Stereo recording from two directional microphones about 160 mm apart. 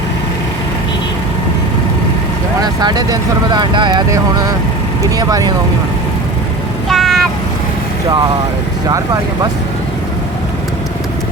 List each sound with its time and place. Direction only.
2.8 s speech: 25° right (ahead or behind)
5.1 s speech: 20° right (ahead or behind)
6.8 s vehicle: centre (ahead or behind)